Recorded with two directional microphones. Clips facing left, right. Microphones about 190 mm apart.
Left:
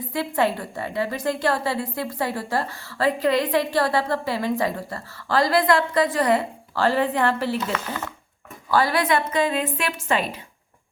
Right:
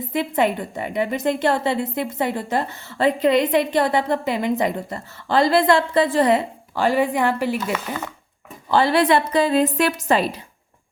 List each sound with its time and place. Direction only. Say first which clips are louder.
0.1 s a woman's voice: right 2 dB; 20° right (ahead or behind)
8.7 s a woman's voice: right 4 dB; 25° right (ahead or behind)